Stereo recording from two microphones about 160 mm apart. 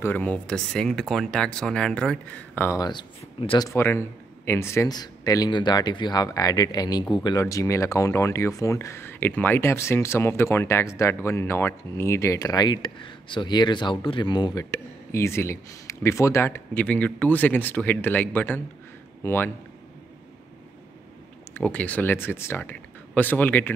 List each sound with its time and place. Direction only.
0.0 s speech: 10° left (ahead or behind)
2.8 s speech: 30° left (ahead or behind)
3.6 s speech: 15° left (ahead or behind)
21.5 s speech: 10° left (ahead or behind)